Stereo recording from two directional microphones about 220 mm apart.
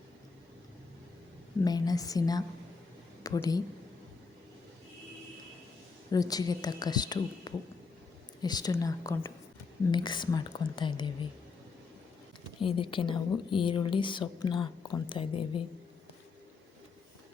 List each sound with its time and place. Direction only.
1.6 s a woman's voice: 15° left (ahead or behind)
6.1 s a woman's voice: 15° left (ahead or behind)
12.5 s speech: 25° left (ahead or behind)